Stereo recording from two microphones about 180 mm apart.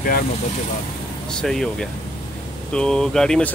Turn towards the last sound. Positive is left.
turn(degrees=5)  # may be behind; listen again after turning